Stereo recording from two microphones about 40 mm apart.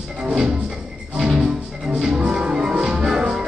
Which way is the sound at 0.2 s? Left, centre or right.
Centre.